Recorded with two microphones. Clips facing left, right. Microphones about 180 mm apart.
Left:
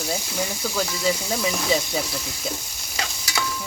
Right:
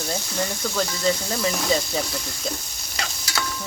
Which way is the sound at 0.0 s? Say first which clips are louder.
Even; 5° left (ahead or behind).